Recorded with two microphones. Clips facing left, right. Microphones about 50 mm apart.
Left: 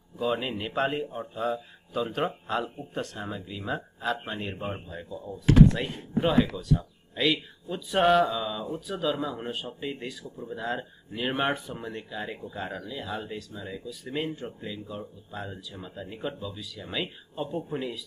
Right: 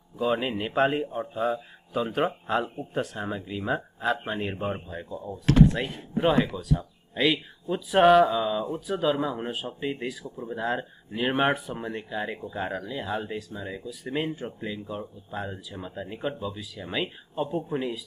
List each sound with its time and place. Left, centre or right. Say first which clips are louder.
0.2 s a man's voice: right 3 dB; centre
3.3 s a man's voice: right 4 dB; centre
7.9 s speech: right 4 dB; centre
8.4 s a man's voice: right 5 dB; centre